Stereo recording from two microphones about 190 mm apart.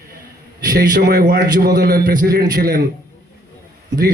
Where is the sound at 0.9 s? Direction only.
55° right (ahead or behind).